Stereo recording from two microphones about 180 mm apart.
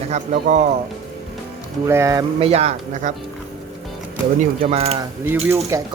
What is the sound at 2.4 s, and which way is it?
Speech, 35° right (ahead or behind).